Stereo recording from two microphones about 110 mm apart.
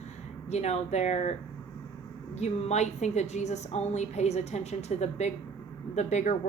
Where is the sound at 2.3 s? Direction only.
85° left.